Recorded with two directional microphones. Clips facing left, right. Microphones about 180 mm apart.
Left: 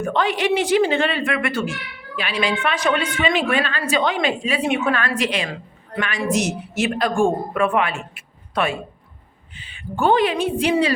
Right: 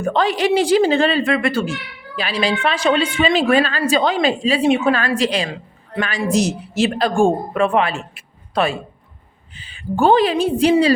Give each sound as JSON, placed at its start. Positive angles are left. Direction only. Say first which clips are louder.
{"t": 0.0, "sound": "speech", "louder": "right 3 dB", "side_deg": -35}